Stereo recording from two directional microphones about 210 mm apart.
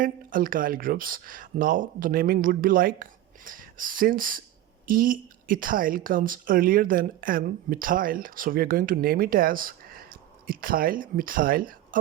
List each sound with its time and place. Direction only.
0.0 s a woman's voice: 40° right (ahead or behind)